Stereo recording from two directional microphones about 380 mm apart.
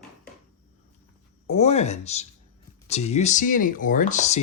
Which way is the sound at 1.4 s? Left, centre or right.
Centre.